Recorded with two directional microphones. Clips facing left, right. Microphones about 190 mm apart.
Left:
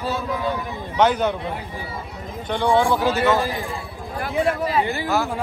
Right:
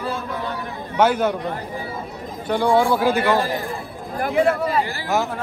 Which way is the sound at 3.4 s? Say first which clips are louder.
Right 1 dB; 50° right (ahead or behind).